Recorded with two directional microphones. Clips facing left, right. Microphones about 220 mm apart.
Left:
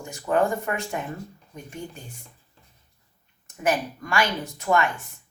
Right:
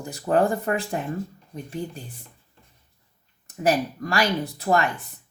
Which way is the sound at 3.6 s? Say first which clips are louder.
Right 3 dB; 35° right (ahead or behind).